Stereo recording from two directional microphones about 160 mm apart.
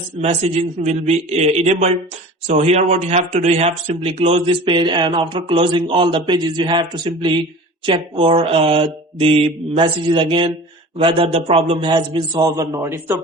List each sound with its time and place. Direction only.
0.2 s a man's voice: 40° right (ahead or behind); by 13.2 s 15° right (ahead or behind)